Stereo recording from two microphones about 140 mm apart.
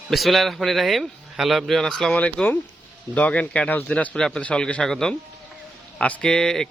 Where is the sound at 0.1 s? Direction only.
Centre (ahead or behind).